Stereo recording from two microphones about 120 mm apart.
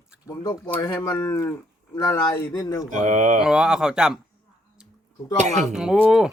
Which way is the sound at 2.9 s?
90° right.